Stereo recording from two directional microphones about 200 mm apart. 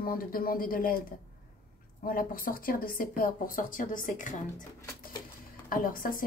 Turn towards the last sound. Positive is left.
turn(degrees=45)  # may be behind; listen again after turning